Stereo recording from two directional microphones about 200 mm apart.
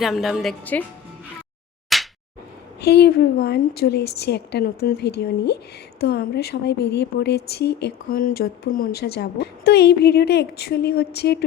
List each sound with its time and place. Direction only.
0.0 s a woman's voice: centre (ahead or behind)
1.9 s a sound: centre (ahead or behind)
2.8 s speech: 55° left (ahead or behind)